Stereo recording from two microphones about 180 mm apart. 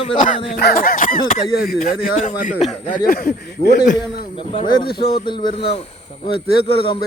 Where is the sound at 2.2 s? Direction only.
45° left (ahead or behind).